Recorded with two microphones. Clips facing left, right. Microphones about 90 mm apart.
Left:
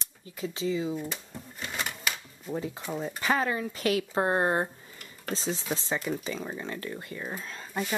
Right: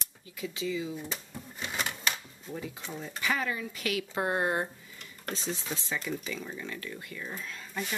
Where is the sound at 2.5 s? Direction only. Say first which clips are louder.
Left 6 dB; 30° left (ahead or behind).